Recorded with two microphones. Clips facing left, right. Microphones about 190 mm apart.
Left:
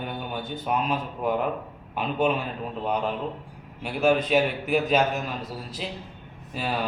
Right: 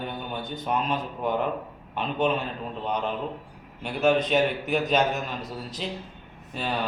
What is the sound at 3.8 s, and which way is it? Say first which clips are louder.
A man's voice: even; 5° left (ahead or behind).